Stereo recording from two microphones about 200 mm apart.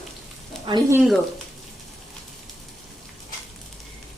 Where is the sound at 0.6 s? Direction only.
25° right (ahead or behind).